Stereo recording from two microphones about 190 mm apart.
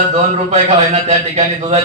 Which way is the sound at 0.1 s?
35° right (ahead or behind).